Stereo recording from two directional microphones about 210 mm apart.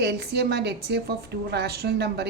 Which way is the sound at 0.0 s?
50° right (ahead or behind).